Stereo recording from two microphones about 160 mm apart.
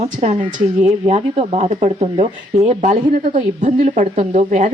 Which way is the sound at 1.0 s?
40° right (ahead or behind).